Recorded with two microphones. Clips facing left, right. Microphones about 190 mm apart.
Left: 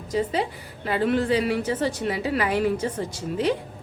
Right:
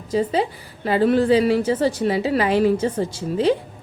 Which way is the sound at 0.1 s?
30° right (ahead or behind).